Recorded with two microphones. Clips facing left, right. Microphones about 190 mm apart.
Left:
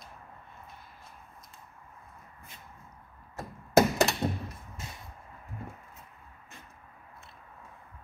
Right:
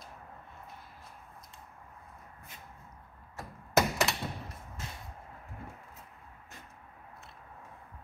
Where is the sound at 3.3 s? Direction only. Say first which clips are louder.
Left 6 dB; 35° left (ahead or behind).